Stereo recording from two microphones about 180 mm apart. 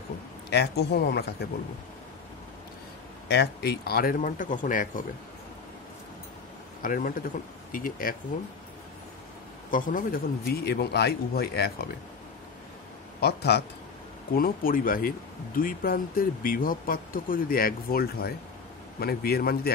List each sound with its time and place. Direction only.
0.5 s a man's voice: 65° left (ahead or behind)
3.3 s speech: 70° left (ahead or behind); by 5.0 s 50° left (ahead or behind)
6.8 s speech: 50° left (ahead or behind)
9.7 s a man's voice: 50° left (ahead or behind)
13.2 s a man's voice: 65° left (ahead or behind)
14.3 s a man's voice: 55° left (ahead or behind)